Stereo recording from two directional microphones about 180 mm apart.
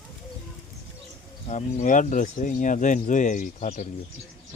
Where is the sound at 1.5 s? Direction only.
45° left (ahead or behind).